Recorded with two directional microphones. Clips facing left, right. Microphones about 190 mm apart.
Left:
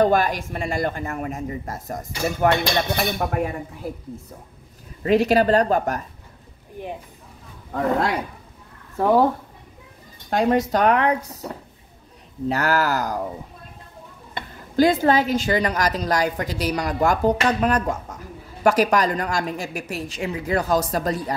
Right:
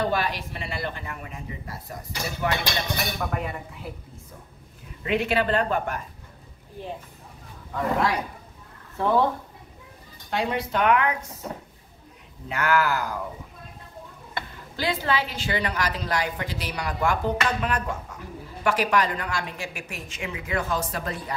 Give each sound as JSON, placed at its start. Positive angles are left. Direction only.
{"t": 0.0, "sound": "a man's voice", "side_deg": 45}
{"t": 5.0, "sound": "a woman's voice", "side_deg": 40}
{"t": 8.9, "sound": "a woman's voice", "side_deg": 40}
{"t": 10.3, "sound": "a woman's voice", "side_deg": 45}
{"t": 14.8, "sound": "a woman's voice", "side_deg": 45}